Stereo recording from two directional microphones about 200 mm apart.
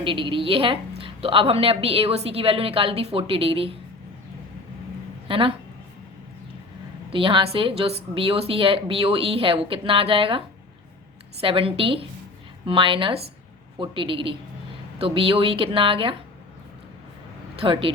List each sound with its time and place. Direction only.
0.0 s a woman's voice: 25° right (ahead or behind)
5.3 s a woman's voice: 25° right (ahead or behind)
7.1 s a woman's voice: 25° right (ahead or behind)
17.6 s a woman's voice: 25° right (ahead or behind)